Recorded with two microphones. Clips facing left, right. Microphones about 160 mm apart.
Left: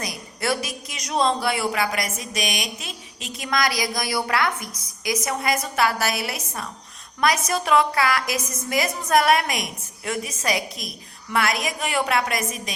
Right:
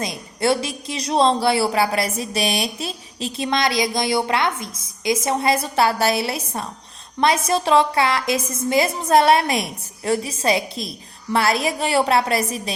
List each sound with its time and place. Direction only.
0.0 s speech: 25° right (ahead or behind)